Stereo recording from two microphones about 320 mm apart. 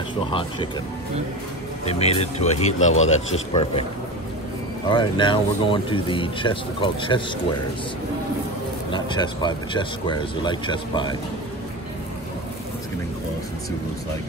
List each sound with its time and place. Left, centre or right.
0.3 s speech: centre
1.9 s speech: centre
4.8 s speech: centre
8.9 s speech: centre